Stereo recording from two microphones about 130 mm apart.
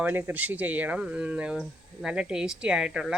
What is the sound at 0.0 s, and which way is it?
Speech, 15° right (ahead or behind).